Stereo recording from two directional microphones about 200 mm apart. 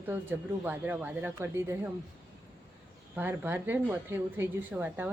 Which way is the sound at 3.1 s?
10° right (ahead or behind).